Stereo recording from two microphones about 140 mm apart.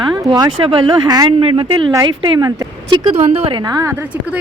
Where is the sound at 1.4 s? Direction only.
40° right (ahead or behind).